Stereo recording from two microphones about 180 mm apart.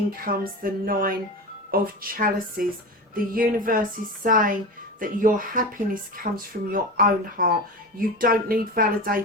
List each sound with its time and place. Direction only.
0.2 s speech: 50° right (ahead or behind)